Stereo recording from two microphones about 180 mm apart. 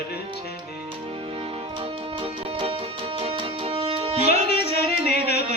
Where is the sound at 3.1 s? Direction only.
30° right (ahead or behind).